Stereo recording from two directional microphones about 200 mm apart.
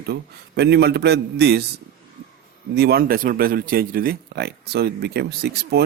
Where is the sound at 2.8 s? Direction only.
50° right (ahead or behind).